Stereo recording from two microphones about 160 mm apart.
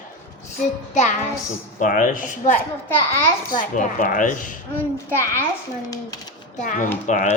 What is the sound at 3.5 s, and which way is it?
A woman's voice, 60° left (ahead or behind).